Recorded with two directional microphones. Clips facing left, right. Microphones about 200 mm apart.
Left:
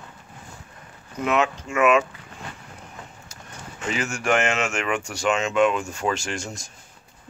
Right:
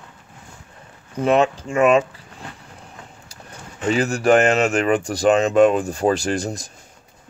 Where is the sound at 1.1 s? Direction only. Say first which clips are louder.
Right 6 dB; 30° right (ahead or behind).